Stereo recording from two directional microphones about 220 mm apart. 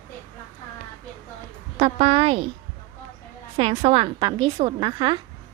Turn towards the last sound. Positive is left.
turn(degrees=-20)  # may be behind; listen again after turning